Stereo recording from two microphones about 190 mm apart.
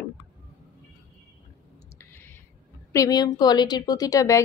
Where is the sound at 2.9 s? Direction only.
20° left (ahead or behind).